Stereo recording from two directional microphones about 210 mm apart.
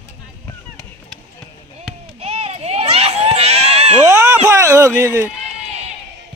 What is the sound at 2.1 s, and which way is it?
Crowd, 30° right (ahead or behind).